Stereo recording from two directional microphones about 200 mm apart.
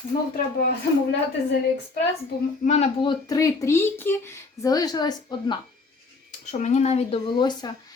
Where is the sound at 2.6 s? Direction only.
35° left (ahead or behind).